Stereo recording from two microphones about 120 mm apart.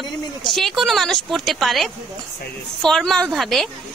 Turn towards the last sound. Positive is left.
turn(degrees=0)  # may be behind; listen again after turning